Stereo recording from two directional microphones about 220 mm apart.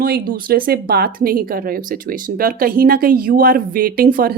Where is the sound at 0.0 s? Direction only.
40° right (ahead or behind).